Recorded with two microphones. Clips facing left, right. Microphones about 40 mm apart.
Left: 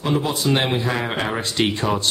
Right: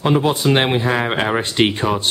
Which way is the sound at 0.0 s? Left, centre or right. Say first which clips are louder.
Right 5 dB; right.